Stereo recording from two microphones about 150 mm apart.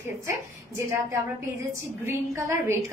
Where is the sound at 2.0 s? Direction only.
15° right (ahead or behind).